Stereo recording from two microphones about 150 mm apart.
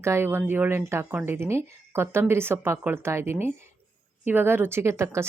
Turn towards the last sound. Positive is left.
turn(degrees=-20)  # may be behind; listen again after turning